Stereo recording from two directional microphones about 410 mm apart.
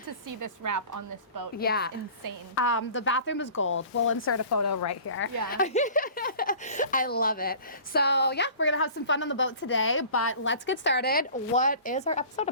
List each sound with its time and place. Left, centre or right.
0.3 s a woman's voice: right
1.5 s a woman's voice: left
5.5 s a woman's voice: centre